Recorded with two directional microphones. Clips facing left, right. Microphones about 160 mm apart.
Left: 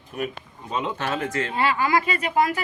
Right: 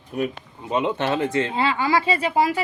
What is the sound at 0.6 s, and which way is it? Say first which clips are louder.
Speech: right 5 dB; 20° right (ahead or behind).